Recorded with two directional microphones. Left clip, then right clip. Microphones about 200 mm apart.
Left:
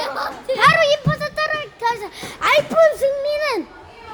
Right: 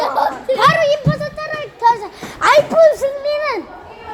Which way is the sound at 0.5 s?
15° left (ahead or behind).